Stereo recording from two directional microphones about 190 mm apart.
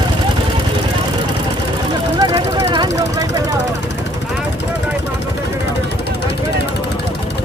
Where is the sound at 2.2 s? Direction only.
25° right (ahead or behind).